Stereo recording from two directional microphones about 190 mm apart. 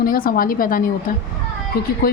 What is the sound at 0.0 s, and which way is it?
Speech, 50° left (ahead or behind).